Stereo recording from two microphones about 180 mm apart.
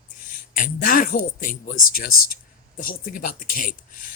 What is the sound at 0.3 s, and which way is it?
Speech, 50° left (ahead or behind).